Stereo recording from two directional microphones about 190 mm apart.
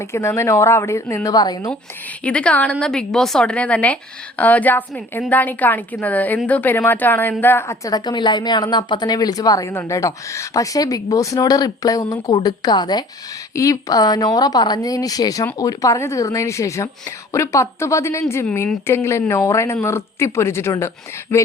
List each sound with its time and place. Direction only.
0.1 s speech: 15° left (ahead or behind)
2.2 s a woman's voice: 5° left (ahead or behind)